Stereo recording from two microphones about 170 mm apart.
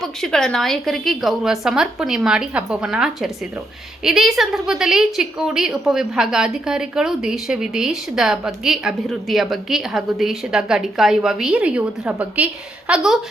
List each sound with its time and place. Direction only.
0.0 s a woman's voice: centre (ahead or behind)